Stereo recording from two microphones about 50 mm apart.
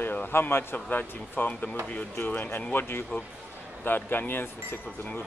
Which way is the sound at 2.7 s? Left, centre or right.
Left.